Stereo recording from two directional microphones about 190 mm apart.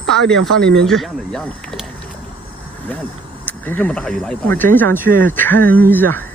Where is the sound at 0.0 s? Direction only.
Centre (ahead or behind).